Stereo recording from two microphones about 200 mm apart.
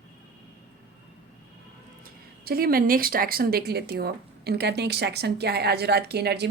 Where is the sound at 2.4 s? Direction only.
50° right (ahead or behind).